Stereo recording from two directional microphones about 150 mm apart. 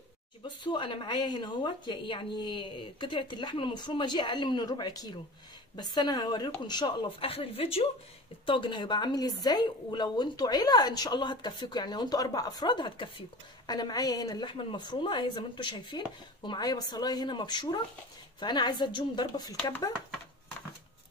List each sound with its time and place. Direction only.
0.7 s a woman's voice: 35° left (ahead or behind)